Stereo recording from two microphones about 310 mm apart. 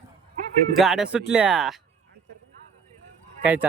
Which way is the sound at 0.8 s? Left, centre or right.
Centre.